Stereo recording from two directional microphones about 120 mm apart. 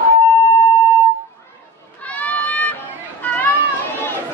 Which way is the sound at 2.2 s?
15° left (ahead or behind).